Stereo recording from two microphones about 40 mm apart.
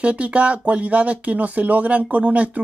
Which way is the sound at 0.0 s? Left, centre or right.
Right.